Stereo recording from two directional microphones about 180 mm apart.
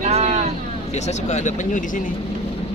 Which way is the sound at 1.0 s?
40° left (ahead or behind).